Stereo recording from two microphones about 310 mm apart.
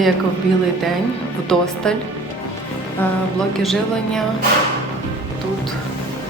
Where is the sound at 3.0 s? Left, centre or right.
Centre.